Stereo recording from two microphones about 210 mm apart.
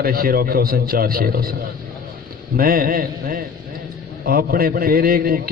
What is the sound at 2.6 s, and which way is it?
A man's voice, 45° right (ahead or behind).